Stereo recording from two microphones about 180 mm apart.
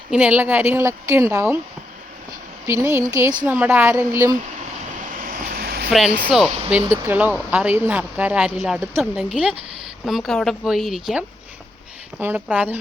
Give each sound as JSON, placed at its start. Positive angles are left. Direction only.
{"t": 0.1, "sound": "a woman's voice", "side_deg": -5}
{"t": 2.6, "sound": "a woman's voice", "side_deg": -15}
{"t": 5.2, "sound": "vehicle", "side_deg": -55}
{"t": 6.3, "sound": "a woman's voice", "side_deg": -5}